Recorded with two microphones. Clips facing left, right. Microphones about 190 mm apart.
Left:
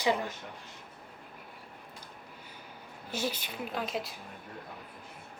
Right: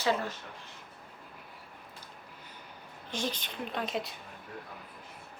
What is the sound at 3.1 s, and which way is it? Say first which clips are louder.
A woman's voice: left 1 dB; 10° left (ahead or behind).